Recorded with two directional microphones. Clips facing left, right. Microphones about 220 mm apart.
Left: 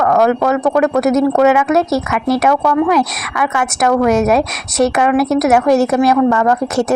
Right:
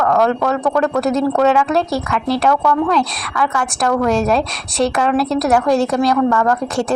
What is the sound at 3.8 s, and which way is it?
Speech, 20° left (ahead or behind).